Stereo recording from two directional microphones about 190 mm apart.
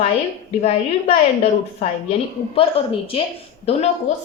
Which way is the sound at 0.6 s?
35° left (ahead or behind).